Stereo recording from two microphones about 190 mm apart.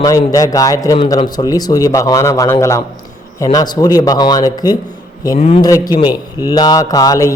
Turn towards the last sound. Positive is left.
turn(degrees=20)  # may be behind; listen again after turning